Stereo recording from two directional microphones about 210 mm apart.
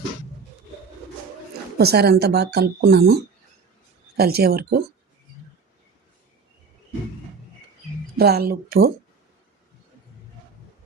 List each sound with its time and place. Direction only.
1.8 s speech: 50° right (ahead or behind)
4.2 s speech: 50° right (ahead or behind)
8.1 s speech: 50° right (ahead or behind)